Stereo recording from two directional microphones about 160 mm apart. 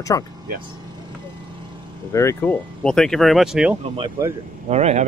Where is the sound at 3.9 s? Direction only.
30° right (ahead or behind).